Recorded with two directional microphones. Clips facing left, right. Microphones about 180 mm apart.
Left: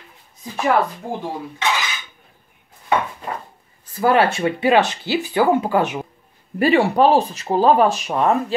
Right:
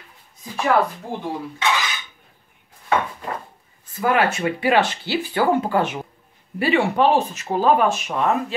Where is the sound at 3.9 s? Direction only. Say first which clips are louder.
Left 3 dB; 35° left (ahead or behind); by 6.0 s 15° left (ahead or behind).